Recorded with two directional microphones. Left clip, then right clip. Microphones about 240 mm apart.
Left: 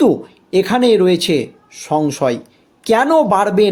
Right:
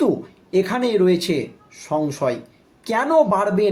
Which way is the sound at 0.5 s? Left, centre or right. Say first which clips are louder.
Left 7 dB; left.